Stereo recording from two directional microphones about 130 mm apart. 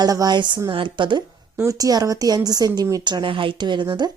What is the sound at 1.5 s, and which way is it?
Speech, 25° right (ahead or behind).